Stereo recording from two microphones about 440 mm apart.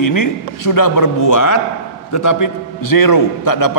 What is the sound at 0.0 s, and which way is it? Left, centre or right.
A man's voice, left.